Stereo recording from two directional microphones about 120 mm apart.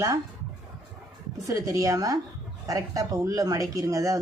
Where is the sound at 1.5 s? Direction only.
30° right (ahead or behind).